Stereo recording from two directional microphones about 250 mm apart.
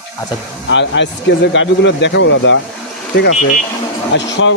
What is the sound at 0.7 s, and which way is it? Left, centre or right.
Speech, left.